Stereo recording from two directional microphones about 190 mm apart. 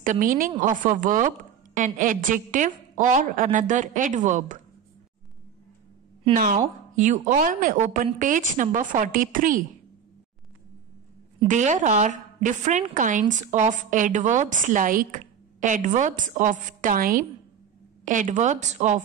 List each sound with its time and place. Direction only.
0.0 s a woman's voice: 45° right (ahead or behind)
6.3 s a woman's voice: 45° right (ahead or behind)
11.4 s a woman's voice: 40° right (ahead or behind)